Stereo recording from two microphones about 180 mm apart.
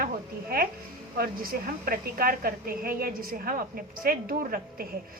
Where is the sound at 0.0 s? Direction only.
55° right (ahead or behind).